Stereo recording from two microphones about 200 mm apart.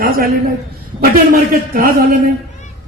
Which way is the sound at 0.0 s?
45° right (ahead or behind).